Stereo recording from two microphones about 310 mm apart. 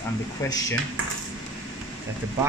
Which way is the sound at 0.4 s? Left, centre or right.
Centre.